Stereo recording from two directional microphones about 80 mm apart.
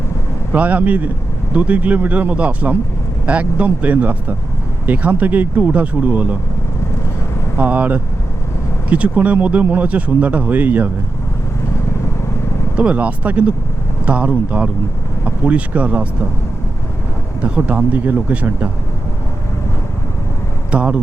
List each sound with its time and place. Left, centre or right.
0.5 s speech: centre
7.6 s speech: centre
12.7 s speech: centre
17.4 s speech: centre
20.7 s speech: centre